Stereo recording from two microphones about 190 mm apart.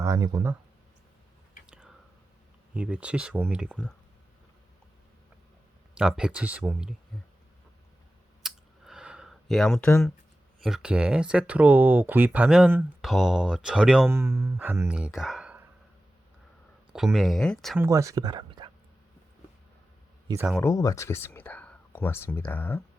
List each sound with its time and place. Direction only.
0.0 s speech: 15° right (ahead or behind)
2.7 s speech: 5° right (ahead or behind)
5.9 s speech: 5° right (ahead or behind)
8.4 s a sound: centre (ahead or behind)
10.6 s speech: centre (ahead or behind)
16.9 s speech: centre (ahead or behind)
17.7 s speech: 15° right (ahead or behind)
20.6 s speech: 15° left (ahead or behind)